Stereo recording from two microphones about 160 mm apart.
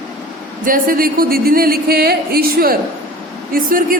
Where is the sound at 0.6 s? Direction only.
60° right (ahead or behind).